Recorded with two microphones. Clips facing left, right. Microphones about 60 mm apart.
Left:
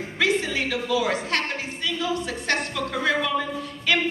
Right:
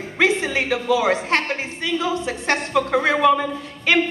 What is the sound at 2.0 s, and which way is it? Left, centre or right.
Speech, right.